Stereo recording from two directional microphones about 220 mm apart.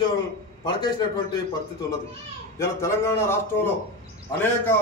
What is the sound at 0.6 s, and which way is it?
Speech, 20° left (ahead or behind).